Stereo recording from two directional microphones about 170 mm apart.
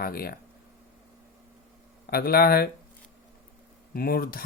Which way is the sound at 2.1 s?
65° left (ahead or behind).